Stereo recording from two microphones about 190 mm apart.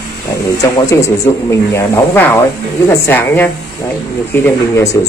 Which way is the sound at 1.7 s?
10° left (ahead or behind).